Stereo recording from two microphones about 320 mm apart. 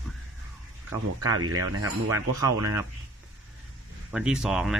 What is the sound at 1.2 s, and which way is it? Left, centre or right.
Speech, right.